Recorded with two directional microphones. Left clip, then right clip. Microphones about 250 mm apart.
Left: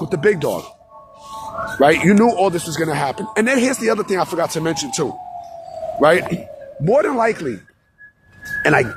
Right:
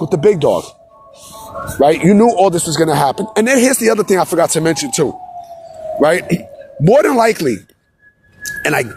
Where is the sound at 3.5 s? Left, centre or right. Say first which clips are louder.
Right 6 dB; right.